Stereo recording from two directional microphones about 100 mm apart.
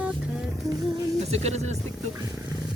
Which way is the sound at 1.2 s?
90° right.